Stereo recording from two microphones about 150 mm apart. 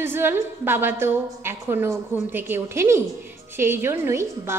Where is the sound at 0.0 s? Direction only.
15° right (ahead or behind).